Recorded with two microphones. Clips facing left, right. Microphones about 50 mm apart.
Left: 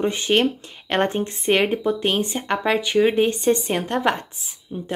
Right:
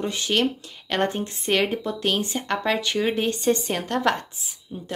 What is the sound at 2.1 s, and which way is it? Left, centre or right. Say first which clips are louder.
Speech: left 2 dB; left.